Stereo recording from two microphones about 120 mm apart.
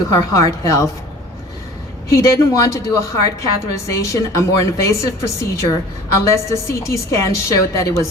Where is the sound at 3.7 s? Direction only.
25° left (ahead or behind).